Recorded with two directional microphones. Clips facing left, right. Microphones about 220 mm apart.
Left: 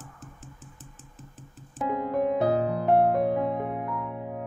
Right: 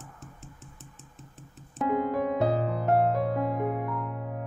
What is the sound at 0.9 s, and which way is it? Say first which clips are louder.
Music: left 1 dB; centre (ahead or behind).